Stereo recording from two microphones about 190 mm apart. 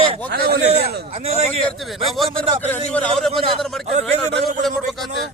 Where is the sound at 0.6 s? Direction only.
35° right (ahead or behind).